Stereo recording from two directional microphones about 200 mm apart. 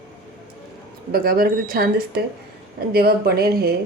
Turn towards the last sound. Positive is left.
turn(degrees=-50)  # may be behind; listen again after turning